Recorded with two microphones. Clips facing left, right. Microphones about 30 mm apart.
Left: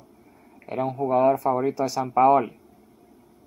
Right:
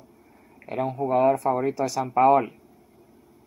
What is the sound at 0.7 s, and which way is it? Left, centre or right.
Speech, centre.